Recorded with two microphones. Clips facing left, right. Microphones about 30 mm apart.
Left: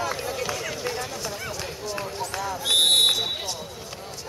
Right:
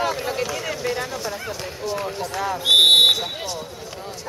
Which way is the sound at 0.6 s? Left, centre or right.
Centre.